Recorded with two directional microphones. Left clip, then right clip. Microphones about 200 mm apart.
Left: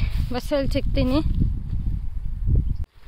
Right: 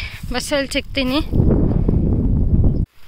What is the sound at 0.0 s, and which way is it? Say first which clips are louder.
Speech: right 6 dB; centre (ahead or behind).